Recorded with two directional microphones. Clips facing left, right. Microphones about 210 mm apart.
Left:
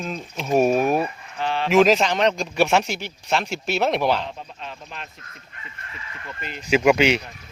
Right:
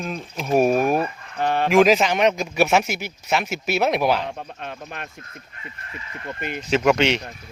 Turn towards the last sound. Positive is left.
turn(degrees=5)  # may be behind; listen again after turning